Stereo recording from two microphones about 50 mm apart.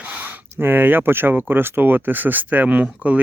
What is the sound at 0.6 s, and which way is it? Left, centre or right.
Speech, right.